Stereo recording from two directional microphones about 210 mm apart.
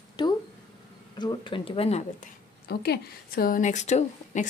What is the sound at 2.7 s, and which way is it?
A woman's voice, 50° left (ahead or behind).